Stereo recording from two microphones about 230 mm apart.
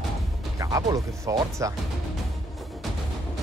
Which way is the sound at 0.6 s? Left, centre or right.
Centre.